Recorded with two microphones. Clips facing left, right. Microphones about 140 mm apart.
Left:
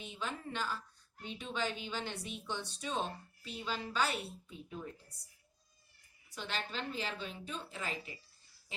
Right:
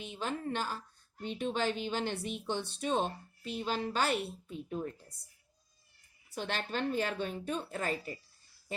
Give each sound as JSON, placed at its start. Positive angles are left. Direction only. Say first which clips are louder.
{"t": 0.0, "sound": "a woman's voice", "louder": "right 5 dB", "side_deg": -50}
{"t": 6.3, "sound": "speech", "louder": "right 5 dB", "side_deg": -45}